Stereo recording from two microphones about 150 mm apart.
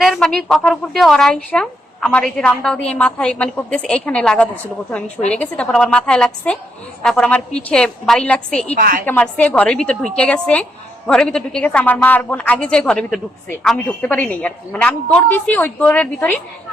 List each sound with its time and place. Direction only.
0.0 s a woman's voice: centre (ahead or behind)
8.8 s a woman's voice: 75° right (ahead or behind)
9.0 s speech: 5° left (ahead or behind)